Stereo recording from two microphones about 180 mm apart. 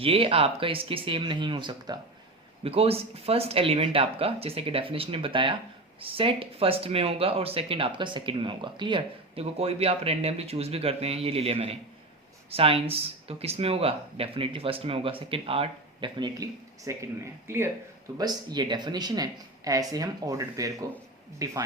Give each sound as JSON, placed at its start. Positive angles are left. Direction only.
{"t": 0.0, "sound": "speech", "side_deg": -30}